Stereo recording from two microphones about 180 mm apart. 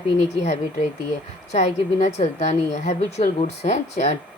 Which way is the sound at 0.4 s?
40° left (ahead or behind).